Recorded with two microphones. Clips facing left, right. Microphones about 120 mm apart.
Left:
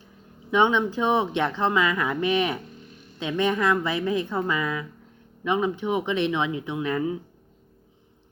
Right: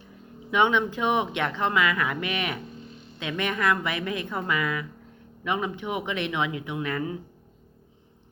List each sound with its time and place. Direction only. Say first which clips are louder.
0.5 s speech: left 2 dB; 20° left (ahead or behind)
1.5 s speech: left 2 dB; 10° left (ahead or behind)
1.7 s speech: left 1 dB; 25° left (ahead or behind)
2.8 s music: right 3 dB; 30° right (ahead or behind)
3.2 s speech: left 5 dB; 25° left (ahead or behind)